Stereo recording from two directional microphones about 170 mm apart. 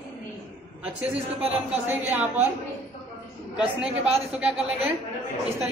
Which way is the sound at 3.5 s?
5° right (ahead or behind).